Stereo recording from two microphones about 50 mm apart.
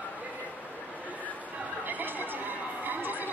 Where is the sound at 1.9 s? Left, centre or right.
Right.